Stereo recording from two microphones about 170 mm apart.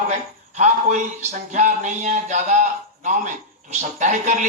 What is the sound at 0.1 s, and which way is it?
Speech, 45° right (ahead or behind).